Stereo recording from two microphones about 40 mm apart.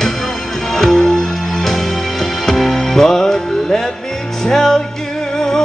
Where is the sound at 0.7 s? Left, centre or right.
Centre.